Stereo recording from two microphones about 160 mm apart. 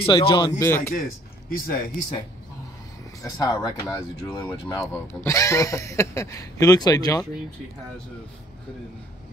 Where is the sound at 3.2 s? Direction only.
25° left (ahead or behind).